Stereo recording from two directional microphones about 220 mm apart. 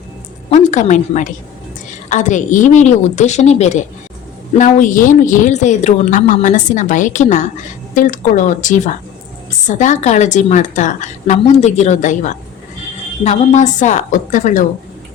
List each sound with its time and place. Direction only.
0.5 s speech: 30° left (ahead or behind)
13.2 s speech: 30° left (ahead or behind)